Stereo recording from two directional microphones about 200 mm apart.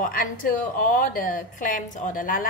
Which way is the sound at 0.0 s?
45° left (ahead or behind).